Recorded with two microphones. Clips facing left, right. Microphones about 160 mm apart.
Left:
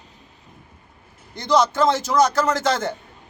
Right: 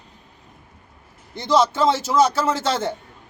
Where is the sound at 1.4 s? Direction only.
25° right (ahead or behind).